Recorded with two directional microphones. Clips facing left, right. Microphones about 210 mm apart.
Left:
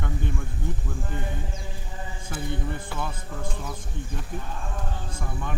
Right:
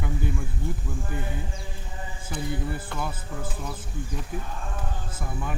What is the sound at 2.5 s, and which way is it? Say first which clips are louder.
Speech: even; 5° right (ahead or behind).